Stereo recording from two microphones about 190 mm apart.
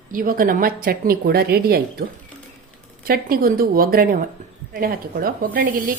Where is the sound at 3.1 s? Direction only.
50° right (ahead or behind).